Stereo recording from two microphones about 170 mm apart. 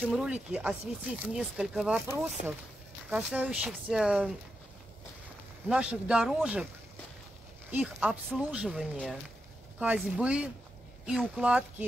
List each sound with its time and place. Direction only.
0.1 s speech: 5° right (ahead or behind)
5.7 s speech: 5° right (ahead or behind)
7.7 s speech: 5° right (ahead or behind)